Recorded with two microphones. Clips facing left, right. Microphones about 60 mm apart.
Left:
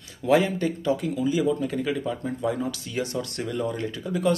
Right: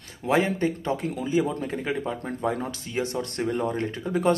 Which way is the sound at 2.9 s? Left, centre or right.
Right.